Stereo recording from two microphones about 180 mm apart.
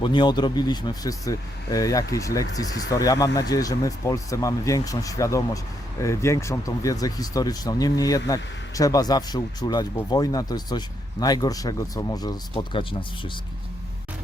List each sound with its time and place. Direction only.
0.0 s speech: 25° left (ahead or behind)